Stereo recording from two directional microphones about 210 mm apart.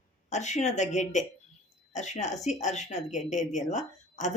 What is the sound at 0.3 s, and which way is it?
Speech, 35° left (ahead or behind).